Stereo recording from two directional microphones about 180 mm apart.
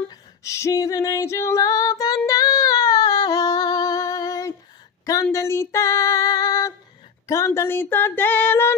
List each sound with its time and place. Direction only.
0.1 s female singing: 15° left (ahead or behind)